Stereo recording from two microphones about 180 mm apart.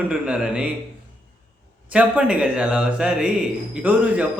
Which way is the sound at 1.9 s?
5° right (ahead or behind).